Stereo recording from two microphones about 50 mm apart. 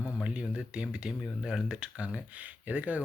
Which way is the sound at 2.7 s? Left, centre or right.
Right.